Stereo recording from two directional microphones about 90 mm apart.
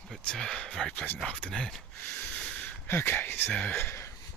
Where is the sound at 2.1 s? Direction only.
20° left (ahead or behind).